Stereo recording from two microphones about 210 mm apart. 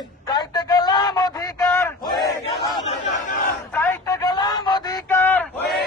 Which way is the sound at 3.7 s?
15° left (ahead or behind).